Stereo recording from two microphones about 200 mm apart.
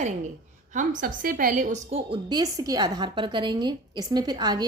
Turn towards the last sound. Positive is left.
turn(degrees=-20)  # may be behind; listen again after turning